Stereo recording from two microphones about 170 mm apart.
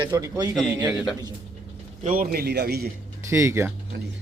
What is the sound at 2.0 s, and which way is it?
Speech, 55° right (ahead or behind).